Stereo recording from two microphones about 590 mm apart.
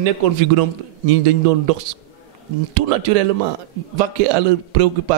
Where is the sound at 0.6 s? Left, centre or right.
Right.